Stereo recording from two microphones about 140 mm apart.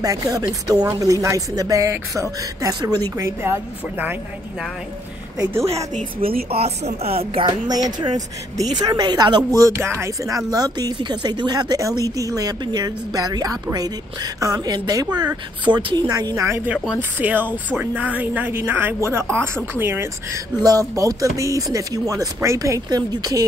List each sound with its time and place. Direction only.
0.0 s speech: 25° right (ahead or behind)
5.4 s speech: 20° right (ahead or behind)
5.9 s speech: 90° right
6.5 s speech: 50° right (ahead or behind)
7.6 s speech: 30° right (ahead or behind)
9.6 s a woman's voice: 20° right (ahead or behind)